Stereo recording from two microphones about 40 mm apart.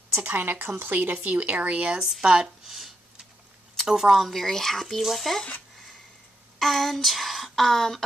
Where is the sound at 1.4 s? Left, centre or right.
Right.